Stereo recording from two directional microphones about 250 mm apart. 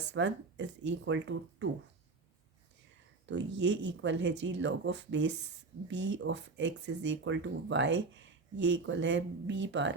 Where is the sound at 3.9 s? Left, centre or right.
Right.